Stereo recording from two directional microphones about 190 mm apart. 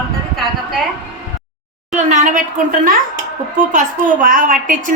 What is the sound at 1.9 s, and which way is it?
A woman's voice, 40° right (ahead or behind).